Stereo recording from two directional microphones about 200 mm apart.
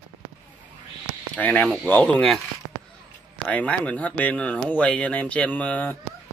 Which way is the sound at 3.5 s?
5° left (ahead or behind).